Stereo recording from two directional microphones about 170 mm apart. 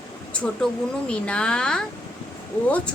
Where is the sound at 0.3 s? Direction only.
5° left (ahead or behind).